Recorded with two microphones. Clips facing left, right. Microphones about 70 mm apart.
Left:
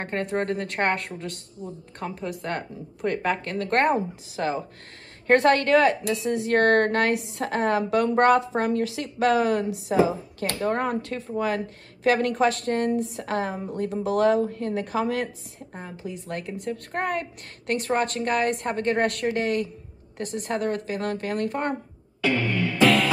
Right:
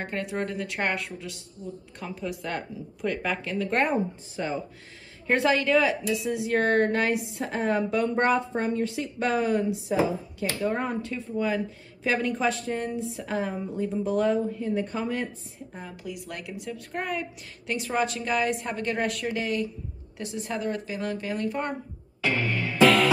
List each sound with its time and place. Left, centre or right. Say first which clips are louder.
0.0 s speech: left 4 dB; left
5.2 s a woman's voice: left 5 dB; left
15.7 s speech: left 3 dB; left